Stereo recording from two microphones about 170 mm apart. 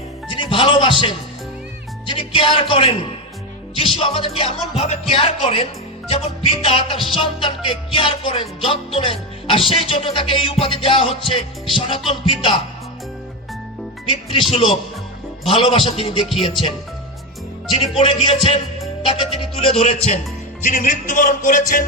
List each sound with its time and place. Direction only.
0.3 s speech: 30° left (ahead or behind)
2.0 s music: 30° left (ahead or behind)
14.1 s speech: 30° left (ahead or behind)
14.5 s music: 35° left (ahead or behind)
15.4 s speech: 30° left (ahead or behind)
17.9 s speech: 30° left (ahead or behind)
19.0 s music: 30° left (ahead or behind); by 21.8 s 55° left (ahead or behind)